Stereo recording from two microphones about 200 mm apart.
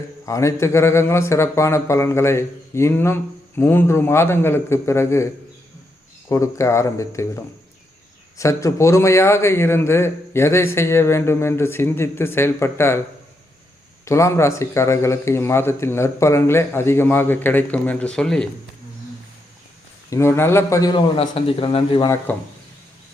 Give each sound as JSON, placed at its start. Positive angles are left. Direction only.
{"t": 0.3, "sound": "speech", "side_deg": 15}
{"t": 8.4, "sound": "speech", "side_deg": 15}
{"t": 14.0, "sound": "speech", "side_deg": 15}
{"t": 20.1, "sound": "speech", "side_deg": 15}